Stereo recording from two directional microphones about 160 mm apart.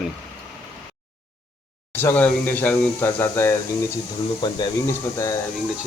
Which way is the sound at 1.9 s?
15° left (ahead or behind).